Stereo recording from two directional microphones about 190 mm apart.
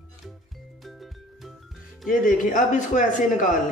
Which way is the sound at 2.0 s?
45° left (ahead or behind).